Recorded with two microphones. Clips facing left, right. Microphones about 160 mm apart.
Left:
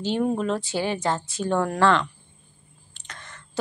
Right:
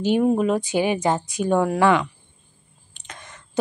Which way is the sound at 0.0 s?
15° right (ahead or behind).